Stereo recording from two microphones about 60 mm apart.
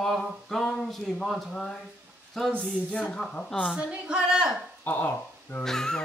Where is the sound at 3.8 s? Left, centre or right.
Centre.